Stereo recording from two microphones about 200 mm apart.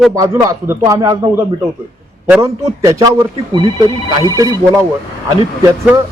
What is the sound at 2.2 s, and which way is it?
Speech, 10° right (ahead or behind).